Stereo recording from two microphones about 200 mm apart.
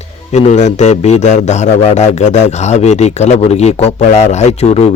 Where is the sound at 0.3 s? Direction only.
35° left (ahead or behind).